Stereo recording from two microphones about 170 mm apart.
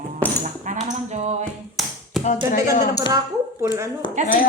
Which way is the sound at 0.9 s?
40° right (ahead or behind).